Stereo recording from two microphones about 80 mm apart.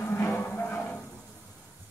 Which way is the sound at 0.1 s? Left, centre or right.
Left.